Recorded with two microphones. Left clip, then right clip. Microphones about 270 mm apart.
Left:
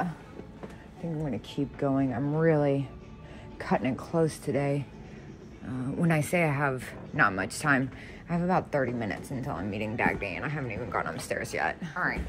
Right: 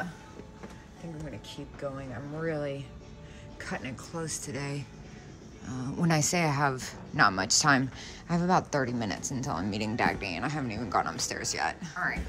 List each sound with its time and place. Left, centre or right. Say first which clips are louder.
1.5 s a woman's voice: left 8 dB; left; by 12.2 s centre